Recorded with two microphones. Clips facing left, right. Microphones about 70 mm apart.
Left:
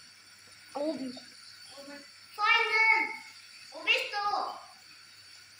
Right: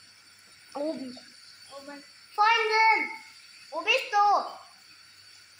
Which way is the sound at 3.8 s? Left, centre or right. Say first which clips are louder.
Right 8 dB; right.